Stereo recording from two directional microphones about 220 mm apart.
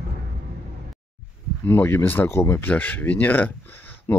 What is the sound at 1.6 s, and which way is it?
Speech, 10° left (ahead or behind).